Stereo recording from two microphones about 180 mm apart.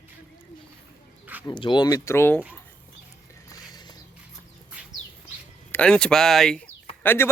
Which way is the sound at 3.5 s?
20° left (ahead or behind).